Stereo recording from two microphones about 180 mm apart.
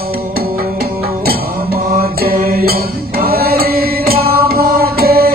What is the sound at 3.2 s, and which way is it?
Chant, 55° right (ahead or behind).